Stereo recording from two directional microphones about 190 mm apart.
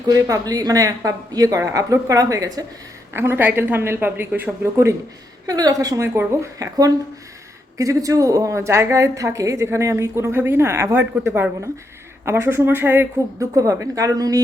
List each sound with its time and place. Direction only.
0.1 s a woman's voice: 20° right (ahead or behind)